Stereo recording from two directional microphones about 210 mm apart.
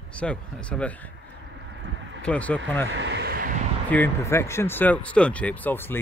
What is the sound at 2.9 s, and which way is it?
Speech, 55° right (ahead or behind).